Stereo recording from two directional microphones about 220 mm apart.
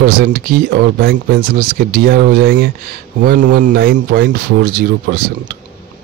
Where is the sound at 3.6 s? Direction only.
40° right (ahead or behind).